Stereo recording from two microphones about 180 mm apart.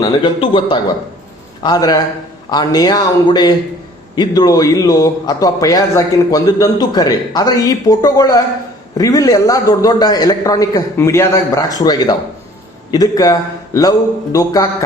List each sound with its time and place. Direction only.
0.0 s a man's voice: 25° left (ahead or behind)